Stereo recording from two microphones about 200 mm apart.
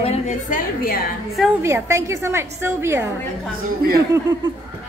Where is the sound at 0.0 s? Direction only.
30° left (ahead or behind).